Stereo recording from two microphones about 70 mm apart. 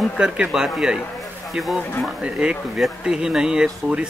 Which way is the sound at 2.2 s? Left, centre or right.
Centre.